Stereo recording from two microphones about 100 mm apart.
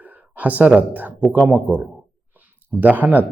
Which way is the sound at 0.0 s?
15° right (ahead or behind).